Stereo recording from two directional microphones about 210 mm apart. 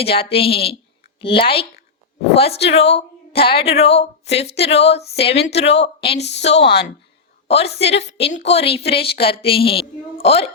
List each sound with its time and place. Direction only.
0.0 s a woman's voice: 25° left (ahead or behind)
6.1 s a woman's voice: 55° left (ahead or behind)
7.4 s a woman's voice: 30° left (ahead or behind)